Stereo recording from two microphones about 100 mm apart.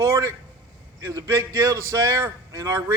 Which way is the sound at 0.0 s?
35° right (ahead or behind).